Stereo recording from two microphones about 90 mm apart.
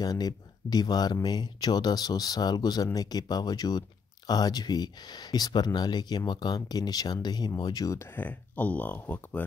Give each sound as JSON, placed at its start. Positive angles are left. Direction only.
{"t": 0.0, "sound": "speech", "side_deg": 45}
{"t": 8.2, "sound": "speech", "side_deg": 20}